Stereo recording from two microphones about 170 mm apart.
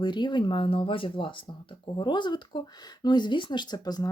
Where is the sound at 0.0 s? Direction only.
25° left (ahead or behind).